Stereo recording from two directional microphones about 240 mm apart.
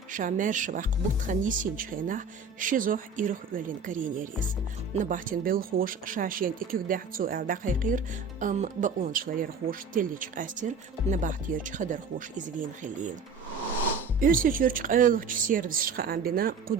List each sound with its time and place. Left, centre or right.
0.1 s speech: right
14.2 s speech: right